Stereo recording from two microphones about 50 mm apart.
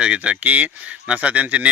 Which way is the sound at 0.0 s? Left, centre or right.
Right.